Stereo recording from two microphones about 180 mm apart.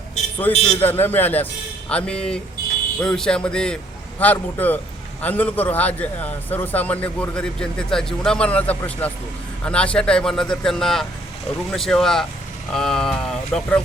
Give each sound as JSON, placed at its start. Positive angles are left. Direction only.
{"t": 0.5, "sound": "a man's voice", "side_deg": 30}
{"t": 0.8, "sound": "a man's voice", "side_deg": 10}